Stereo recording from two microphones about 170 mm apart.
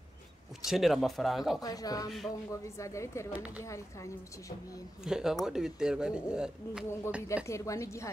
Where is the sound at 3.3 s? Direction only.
10° right (ahead or behind).